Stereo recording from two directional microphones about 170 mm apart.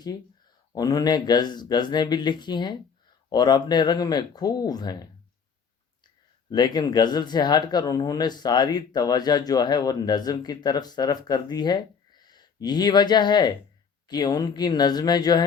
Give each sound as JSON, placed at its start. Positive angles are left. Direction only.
{"t": 0.7, "sound": "speech", "side_deg": 20}
{"t": 6.5, "sound": "speech", "side_deg": 25}